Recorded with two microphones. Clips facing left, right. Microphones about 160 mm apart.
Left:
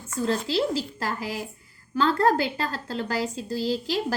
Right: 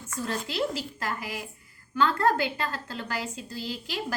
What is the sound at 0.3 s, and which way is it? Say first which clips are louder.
A woman's voice: left 5 dB; 30° left (ahead or behind).